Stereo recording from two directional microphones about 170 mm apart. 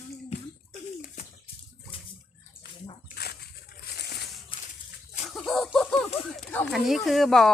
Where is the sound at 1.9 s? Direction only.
30° left (ahead or behind).